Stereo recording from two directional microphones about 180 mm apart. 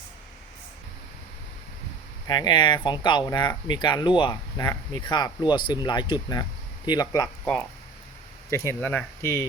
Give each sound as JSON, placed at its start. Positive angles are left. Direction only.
{"t": 2.2, "sound": "speech", "side_deg": 20}
{"t": 8.4, "sound": "speech", "side_deg": 15}